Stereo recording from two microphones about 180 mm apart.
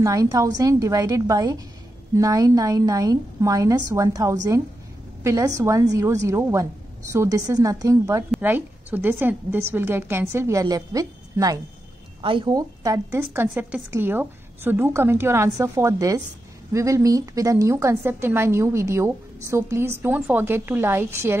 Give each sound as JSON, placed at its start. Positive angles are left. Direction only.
{"t": 0.0, "sound": "a woman's voice", "side_deg": -20}